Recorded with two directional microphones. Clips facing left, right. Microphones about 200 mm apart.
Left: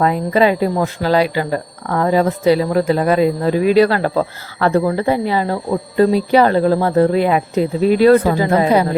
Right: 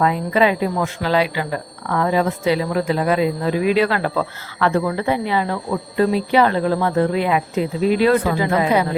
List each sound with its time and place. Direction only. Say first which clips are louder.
0.0 s speech: left 3 dB; 40° left (ahead or behind)